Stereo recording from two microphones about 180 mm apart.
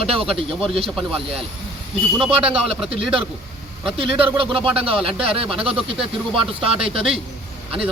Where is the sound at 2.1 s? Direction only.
30° right (ahead or behind).